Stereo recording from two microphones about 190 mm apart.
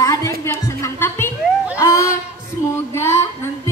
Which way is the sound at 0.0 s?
15° left (ahead or behind).